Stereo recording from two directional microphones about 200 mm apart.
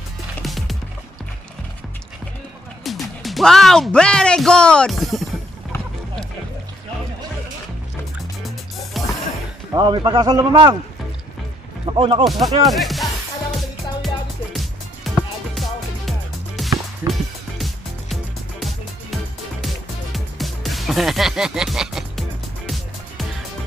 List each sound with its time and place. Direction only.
0.4 s music: centre (ahead or behind)
2.8 s speech: centre (ahead or behind)
8.5 s music: centre (ahead or behind)
9.8 s a man's voice: 20° right (ahead or behind)
11.8 s speech: 25° right (ahead or behind)
12.6 s music: centre (ahead or behind)
20.3 s music: centre (ahead or behind)